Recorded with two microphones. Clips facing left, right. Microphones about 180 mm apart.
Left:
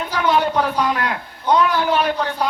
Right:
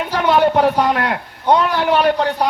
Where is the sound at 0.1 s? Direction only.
55° right (ahead or behind).